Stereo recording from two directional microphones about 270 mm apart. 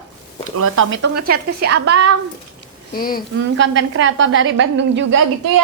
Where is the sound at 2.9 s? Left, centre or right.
Left.